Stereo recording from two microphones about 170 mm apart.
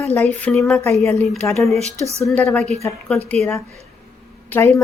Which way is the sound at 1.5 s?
Centre (ahead or behind).